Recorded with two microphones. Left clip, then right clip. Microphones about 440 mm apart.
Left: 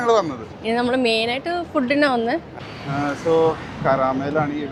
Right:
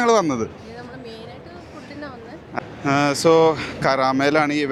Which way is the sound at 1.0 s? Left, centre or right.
Left.